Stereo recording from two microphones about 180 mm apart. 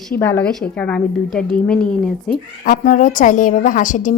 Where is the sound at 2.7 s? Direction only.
45° left (ahead or behind).